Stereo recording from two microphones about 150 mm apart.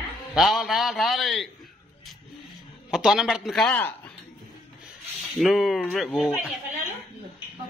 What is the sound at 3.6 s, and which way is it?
Speech, 10° left (ahead or behind).